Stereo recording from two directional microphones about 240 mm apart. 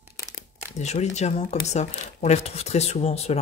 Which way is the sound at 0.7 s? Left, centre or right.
Left.